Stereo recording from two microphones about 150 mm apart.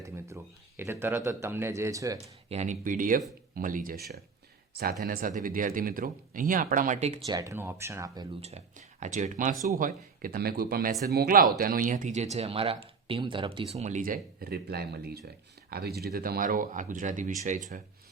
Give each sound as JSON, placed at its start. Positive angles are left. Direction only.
{"t": 0.0, "sound": "speech", "side_deg": -20}
{"t": 2.5, "sound": "speech", "side_deg": -50}
{"t": 4.8, "sound": "speech", "side_deg": -80}
{"t": 7.3, "sound": "speech", "side_deg": -20}
{"t": 8.4, "sound": "speech", "side_deg": -45}